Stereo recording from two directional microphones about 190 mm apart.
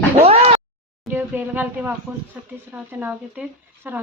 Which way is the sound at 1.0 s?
10° right (ahead or behind).